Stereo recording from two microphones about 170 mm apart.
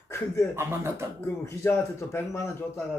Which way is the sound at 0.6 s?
15° right (ahead or behind).